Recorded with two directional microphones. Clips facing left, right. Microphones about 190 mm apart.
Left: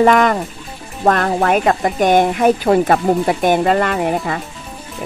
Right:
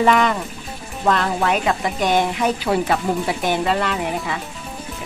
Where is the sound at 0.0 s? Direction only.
50° left (ahead or behind).